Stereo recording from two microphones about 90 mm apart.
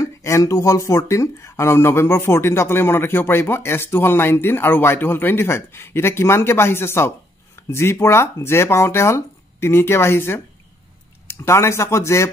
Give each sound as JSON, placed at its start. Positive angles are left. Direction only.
{"t": 0.0, "sound": "speech", "side_deg": 35}